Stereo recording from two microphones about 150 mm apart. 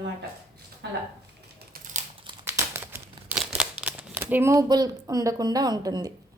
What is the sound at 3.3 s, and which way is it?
Speech, 5° right (ahead or behind).